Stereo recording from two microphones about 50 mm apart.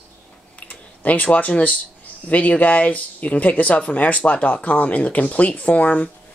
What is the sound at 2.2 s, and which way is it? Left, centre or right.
Speech, left.